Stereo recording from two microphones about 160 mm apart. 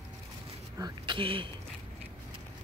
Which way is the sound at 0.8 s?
30° right (ahead or behind).